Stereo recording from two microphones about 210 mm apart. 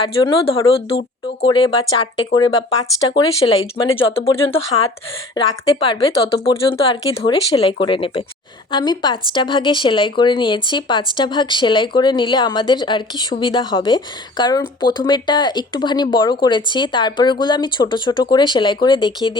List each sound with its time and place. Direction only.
0.0 s a woman's voice: 25° left (ahead or behind)